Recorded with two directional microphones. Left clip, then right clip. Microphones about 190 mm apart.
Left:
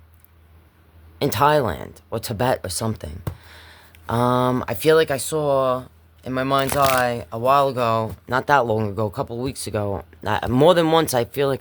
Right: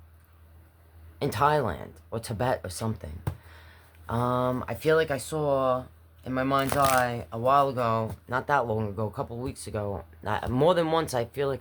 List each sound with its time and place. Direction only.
1.2 s speech: 50° left (ahead or behind)